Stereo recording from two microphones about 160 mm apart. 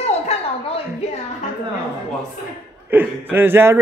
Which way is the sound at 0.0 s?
40° left (ahead or behind).